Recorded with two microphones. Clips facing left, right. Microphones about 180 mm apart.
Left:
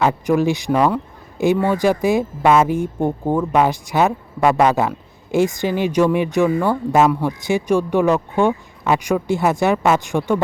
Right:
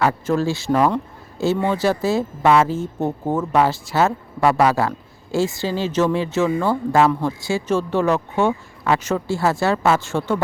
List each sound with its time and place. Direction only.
0.0 s a man's voice: 15° left (ahead or behind)